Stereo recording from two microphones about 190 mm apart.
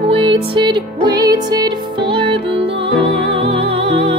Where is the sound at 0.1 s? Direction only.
25° right (ahead or behind).